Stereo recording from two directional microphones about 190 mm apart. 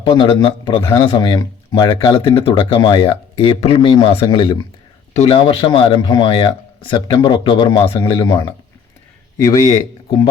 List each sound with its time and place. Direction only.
0.0 s speech: 25° left (ahead or behind)